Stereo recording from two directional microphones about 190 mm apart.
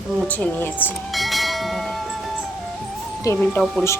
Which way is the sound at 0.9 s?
Centre (ahead or behind).